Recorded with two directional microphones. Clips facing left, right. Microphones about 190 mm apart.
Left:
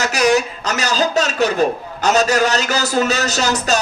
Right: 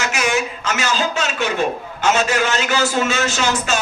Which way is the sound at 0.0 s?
40° left (ahead or behind).